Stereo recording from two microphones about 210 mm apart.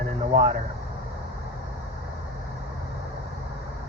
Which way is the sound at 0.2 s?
30° right (ahead or behind).